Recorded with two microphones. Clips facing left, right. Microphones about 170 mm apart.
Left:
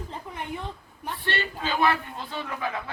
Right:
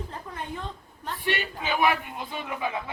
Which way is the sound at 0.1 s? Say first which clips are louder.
Left 1 dB; 15° left (ahead or behind).